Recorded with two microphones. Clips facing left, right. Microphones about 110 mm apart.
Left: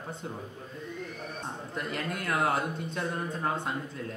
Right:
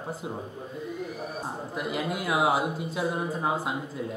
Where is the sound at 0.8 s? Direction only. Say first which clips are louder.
Right 4 dB; 5° right (ahead or behind).